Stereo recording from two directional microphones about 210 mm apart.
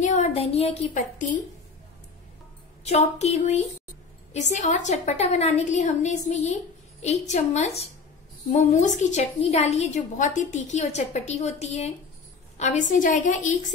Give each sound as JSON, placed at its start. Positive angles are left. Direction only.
{"t": 0.0, "sound": "a woman's voice", "side_deg": 35}
{"t": 2.8, "sound": "a woman's voice", "side_deg": 30}